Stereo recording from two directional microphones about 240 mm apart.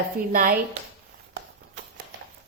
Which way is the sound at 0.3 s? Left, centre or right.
Right.